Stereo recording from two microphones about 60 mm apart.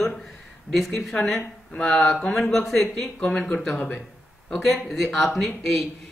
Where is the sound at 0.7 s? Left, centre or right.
Centre.